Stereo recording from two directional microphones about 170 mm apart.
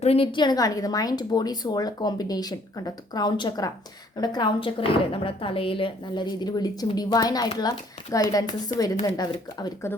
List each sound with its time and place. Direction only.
0.0 s speech: 35° left (ahead or behind)